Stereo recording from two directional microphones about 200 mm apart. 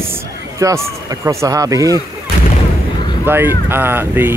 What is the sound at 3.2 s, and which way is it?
Speech, 10° right (ahead or behind).